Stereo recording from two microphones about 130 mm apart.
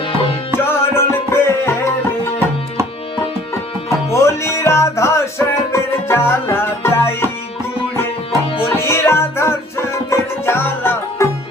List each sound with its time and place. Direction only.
0.1 s tabla: 45° left (ahead or behind)
0.6 s music: 20° left (ahead or behind)
4.1 s music: 20° left (ahead or behind)
8.7 s music: 20° left (ahead or behind)